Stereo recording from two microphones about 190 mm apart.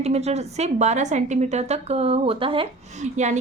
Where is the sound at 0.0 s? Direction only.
35° right (ahead or behind).